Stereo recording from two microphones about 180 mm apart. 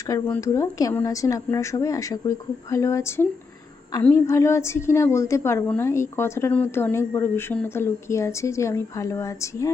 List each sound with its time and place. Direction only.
0.1 s a woman's voice: 15° left (ahead or behind)